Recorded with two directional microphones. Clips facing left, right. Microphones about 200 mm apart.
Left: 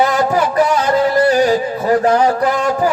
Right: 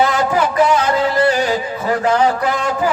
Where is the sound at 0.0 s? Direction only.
40° left (ahead or behind).